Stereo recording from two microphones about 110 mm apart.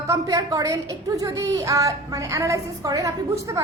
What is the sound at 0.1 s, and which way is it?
A woman's voice, 30° right (ahead or behind).